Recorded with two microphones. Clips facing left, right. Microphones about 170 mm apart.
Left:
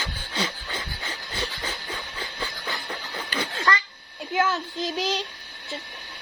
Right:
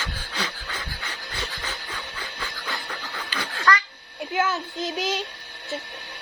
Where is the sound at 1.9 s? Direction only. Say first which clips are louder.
Left 1 dB; 25° left (ahead or behind).